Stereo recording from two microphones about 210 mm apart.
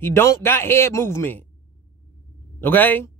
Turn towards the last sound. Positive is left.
turn(degrees=10)  # may be behind; listen again after turning